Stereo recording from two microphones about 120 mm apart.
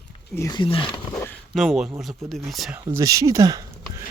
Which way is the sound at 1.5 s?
Centre (ahead or behind).